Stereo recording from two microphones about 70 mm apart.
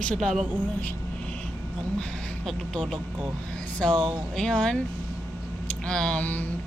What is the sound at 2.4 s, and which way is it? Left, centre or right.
Speech, centre.